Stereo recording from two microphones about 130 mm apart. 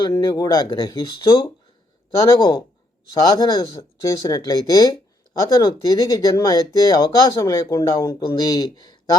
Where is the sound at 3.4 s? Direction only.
35° left (ahead or behind).